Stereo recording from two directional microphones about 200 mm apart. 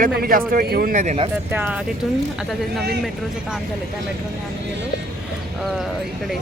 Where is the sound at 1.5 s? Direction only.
10° right (ahead or behind).